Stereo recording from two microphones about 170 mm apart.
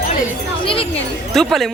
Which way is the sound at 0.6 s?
30° left (ahead or behind).